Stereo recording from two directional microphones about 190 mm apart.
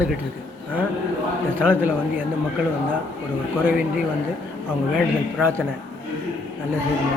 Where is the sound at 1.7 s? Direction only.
10° right (ahead or behind).